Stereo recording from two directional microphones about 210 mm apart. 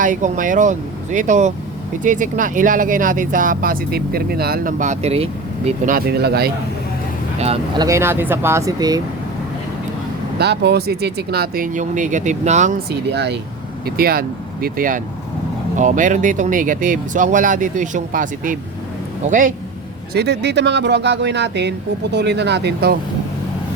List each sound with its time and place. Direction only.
0.0 s speech: 40° right (ahead or behind)
7.3 s speech: 30° right (ahead or behind)
10.3 s speech: 50° right (ahead or behind); by 12.7 s 35° right (ahead or behind)
12.9 s speech: 50° right (ahead or behind)
20.1 s speech: 55° right (ahead or behind)